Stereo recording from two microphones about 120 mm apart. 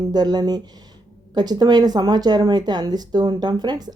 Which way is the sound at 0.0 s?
35° right (ahead or behind).